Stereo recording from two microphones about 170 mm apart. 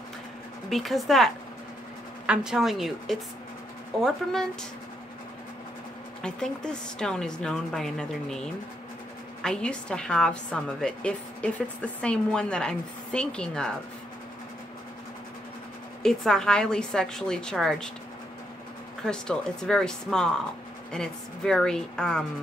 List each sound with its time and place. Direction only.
0.7 s a woman's voice: centre (ahead or behind)
6.2 s a woman's voice: 5° left (ahead or behind)
16.0 s a woman's voice: 5° left (ahead or behind)
19.0 s a woman's voice: 5° left (ahead or behind)